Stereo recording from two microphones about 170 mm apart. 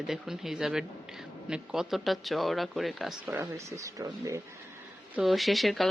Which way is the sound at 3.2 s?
15° right (ahead or behind).